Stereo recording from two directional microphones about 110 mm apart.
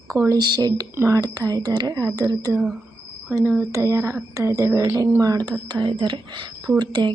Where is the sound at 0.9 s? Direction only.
25° right (ahead or behind).